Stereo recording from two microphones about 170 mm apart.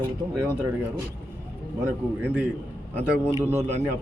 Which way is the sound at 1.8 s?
10° right (ahead or behind).